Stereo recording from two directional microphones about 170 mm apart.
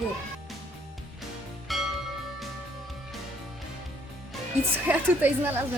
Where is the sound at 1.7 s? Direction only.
Centre (ahead or behind).